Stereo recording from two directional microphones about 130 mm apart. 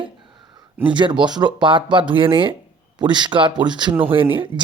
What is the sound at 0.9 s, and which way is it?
Speech, 35° right (ahead or behind).